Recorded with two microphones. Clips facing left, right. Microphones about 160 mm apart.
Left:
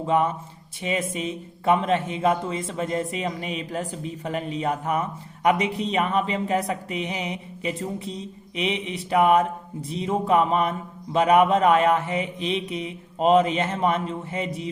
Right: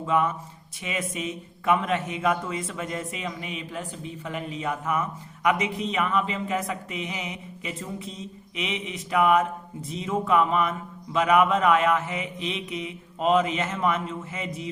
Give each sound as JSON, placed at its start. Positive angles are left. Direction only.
{"t": 0.0, "sound": "a man's voice", "side_deg": 30}